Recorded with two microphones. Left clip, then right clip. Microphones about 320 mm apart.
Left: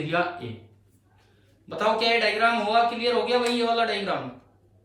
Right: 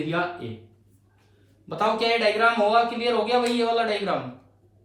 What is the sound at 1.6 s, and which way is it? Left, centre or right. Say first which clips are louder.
A man's voice: even; centre.